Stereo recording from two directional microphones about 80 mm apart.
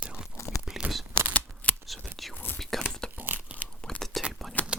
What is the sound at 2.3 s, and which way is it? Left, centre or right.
Whispering, left.